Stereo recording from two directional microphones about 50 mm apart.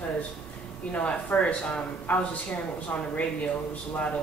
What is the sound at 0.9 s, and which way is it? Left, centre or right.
Speech, left.